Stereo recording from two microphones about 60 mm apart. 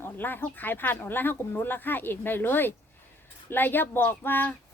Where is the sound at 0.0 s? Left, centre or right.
Left.